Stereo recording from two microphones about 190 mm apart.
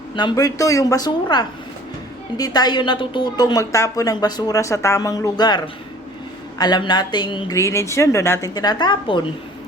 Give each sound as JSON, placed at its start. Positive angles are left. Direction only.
{"t": 0.2, "sound": "a woman's voice", "side_deg": 20}